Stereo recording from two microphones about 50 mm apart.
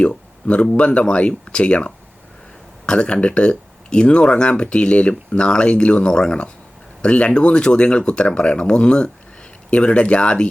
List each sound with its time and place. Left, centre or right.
0.0 s speech: left